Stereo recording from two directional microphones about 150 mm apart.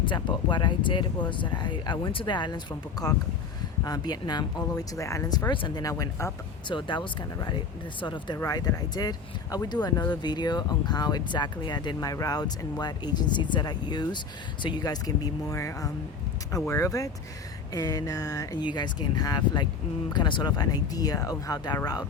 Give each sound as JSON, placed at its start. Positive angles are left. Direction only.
{"t": 0.0, "sound": "speech", "side_deg": 30}
{"t": 6.7, "sound": "speech", "side_deg": 35}